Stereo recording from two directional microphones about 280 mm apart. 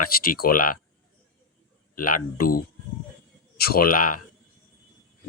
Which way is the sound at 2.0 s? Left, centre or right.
Left.